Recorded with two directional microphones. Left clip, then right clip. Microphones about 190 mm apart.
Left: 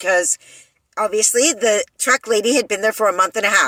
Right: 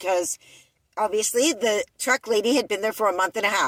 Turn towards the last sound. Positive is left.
turn(degrees=0)  # may be behind; listen again after turning